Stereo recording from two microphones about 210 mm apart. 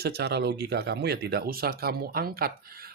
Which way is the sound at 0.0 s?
50° right (ahead or behind).